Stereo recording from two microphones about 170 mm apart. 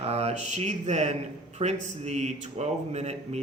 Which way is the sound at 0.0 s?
40° right (ahead or behind).